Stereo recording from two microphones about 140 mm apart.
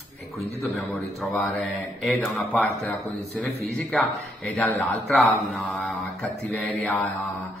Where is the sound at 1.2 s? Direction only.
Centre (ahead or behind).